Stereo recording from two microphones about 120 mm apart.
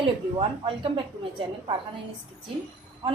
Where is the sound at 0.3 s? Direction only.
50° right (ahead or behind).